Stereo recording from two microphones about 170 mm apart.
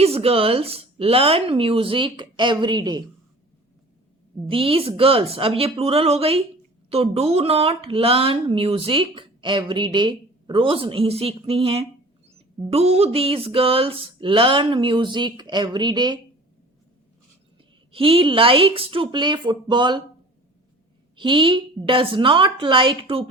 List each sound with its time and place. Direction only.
0.0 s speech: 35° right (ahead or behind)
4.4 s speech: 35° right (ahead or behind)
17.9 s speech: 35° right (ahead or behind)
21.2 s a woman's voice: 30° right (ahead or behind)